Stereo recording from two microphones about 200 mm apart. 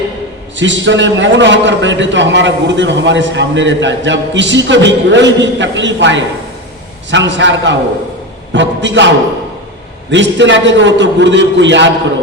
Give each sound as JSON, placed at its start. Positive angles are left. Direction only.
{"t": 0.5, "sound": "a man's voice", "side_deg": -65}